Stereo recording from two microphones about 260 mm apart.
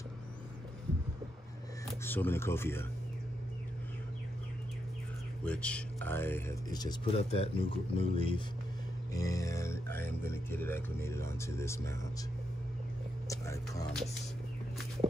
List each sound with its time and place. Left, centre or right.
1.9 s speech: centre
5.4 s speech: centre
13.3 s vehicle: centre